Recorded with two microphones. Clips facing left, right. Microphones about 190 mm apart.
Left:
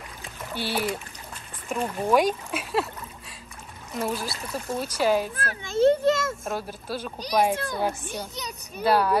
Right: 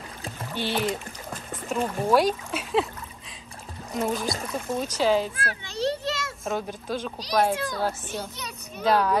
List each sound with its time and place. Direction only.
0.6 s a woman's voice: 10° left (ahead or behind)
3.9 s a woman's voice: 5° left (ahead or behind)
5.3 s a child's voice: 45° left (ahead or behind)
6.4 s a woman's voice: 5° left (ahead or behind)